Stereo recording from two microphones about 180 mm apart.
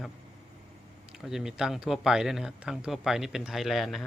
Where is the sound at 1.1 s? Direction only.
Centre (ahead or behind).